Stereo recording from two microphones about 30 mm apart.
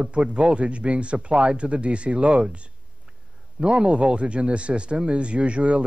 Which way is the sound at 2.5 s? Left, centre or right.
Right.